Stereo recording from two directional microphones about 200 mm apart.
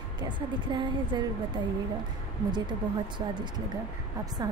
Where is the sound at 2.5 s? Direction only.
20° right (ahead or behind).